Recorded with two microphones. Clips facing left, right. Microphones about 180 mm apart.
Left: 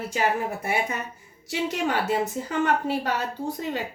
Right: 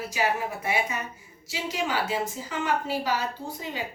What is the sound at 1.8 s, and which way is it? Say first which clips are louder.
A woman's voice: left 3 dB; 60° left (ahead or behind).